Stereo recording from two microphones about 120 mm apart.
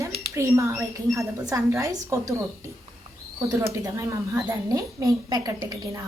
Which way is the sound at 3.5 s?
25° right (ahead or behind).